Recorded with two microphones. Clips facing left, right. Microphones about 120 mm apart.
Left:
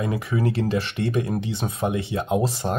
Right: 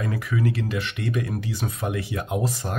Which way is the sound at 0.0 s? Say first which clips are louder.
Left 2 dB; 25° left (ahead or behind).